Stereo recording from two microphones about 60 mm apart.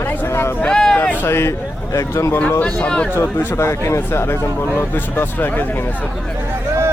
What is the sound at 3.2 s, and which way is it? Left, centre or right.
Speech, left.